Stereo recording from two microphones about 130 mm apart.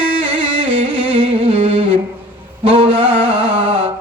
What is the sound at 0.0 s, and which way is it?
Music, 10° right (ahead or behind).